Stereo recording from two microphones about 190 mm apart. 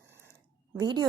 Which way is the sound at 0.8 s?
20° right (ahead or behind).